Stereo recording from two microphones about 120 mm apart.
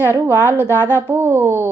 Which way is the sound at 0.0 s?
20° right (ahead or behind).